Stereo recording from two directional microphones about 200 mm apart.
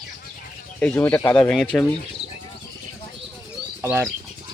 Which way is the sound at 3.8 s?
10° right (ahead or behind).